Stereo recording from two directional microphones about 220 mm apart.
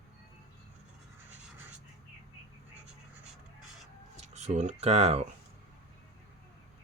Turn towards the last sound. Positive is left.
turn(degrees=-30)  # may be behind; listen again after turning